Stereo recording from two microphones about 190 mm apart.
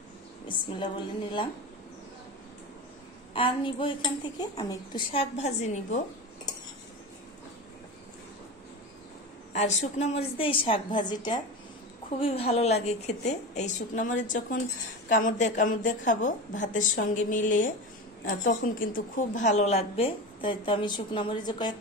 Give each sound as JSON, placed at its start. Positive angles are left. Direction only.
{"t": 0.5, "sound": "a woman's voice", "side_deg": 25}
{"t": 3.3, "sound": "a woman's voice", "side_deg": 25}
{"t": 9.5, "sound": "a woman's voice", "side_deg": 35}